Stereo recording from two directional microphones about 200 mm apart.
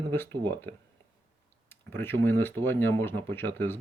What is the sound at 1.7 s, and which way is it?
Speech, 10° left (ahead or behind).